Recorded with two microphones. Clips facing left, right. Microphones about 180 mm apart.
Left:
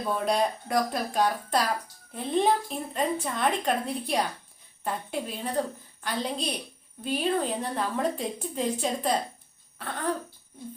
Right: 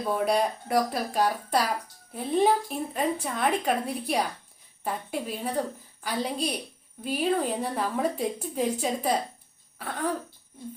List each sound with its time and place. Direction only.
0.3 s a woman's voice: 5° right (ahead or behind)